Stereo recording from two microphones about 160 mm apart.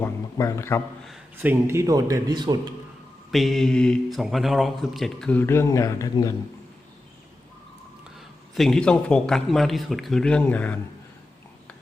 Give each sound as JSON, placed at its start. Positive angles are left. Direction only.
{"t": 0.0, "sound": "a sound", "side_deg": 20}
{"t": 1.4, "sound": "speech", "side_deg": -15}
{"t": 3.3, "sound": "speech", "side_deg": 0}
{"t": 8.5, "sound": "speech", "side_deg": 0}